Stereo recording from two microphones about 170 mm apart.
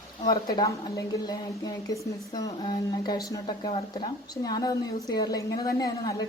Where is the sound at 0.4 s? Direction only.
25° left (ahead or behind).